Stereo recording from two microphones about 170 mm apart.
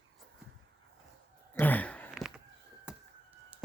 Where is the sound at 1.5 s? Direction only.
10° left (ahead or behind).